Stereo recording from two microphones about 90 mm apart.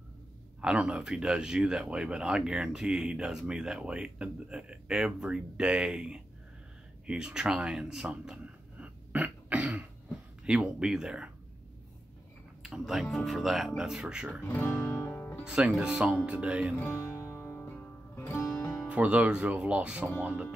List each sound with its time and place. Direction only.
0.6 s speech: 10° right (ahead or behind)
12.6 s speech: 5° right (ahead or behind)
14.4 s speech: 20° left (ahead or behind)
14.9 s music: 25° left (ahead or behind)
15.4 s speech: 10° right (ahead or behind)
16.9 s music: 25° left (ahead or behind)
18.9 s speech: 15° right (ahead or behind)